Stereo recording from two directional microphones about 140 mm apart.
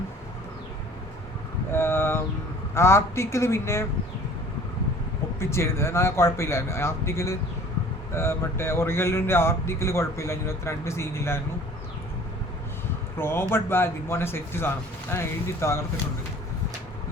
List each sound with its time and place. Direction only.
1.7 s vehicle: 15° left (ahead or behind)
2.7 s speech: 20° left (ahead or behind)
5.4 s speech: 20° left (ahead or behind)
13.1 s speech: 15° left (ahead or behind)